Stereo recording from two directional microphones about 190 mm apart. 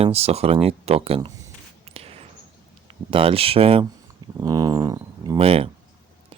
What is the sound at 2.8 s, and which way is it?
Speech, 30° right (ahead or behind).